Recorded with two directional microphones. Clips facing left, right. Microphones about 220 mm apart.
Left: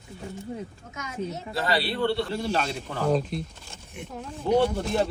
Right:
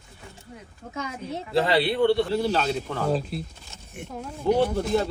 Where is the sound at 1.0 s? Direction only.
30° right (ahead or behind).